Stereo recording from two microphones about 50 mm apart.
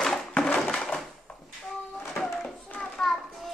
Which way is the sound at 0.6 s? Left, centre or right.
Centre.